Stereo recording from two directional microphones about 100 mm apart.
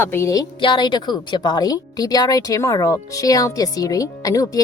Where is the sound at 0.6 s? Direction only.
55° left (ahead or behind).